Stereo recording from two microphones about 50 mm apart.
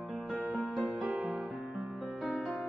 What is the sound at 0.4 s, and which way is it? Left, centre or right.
Music, left.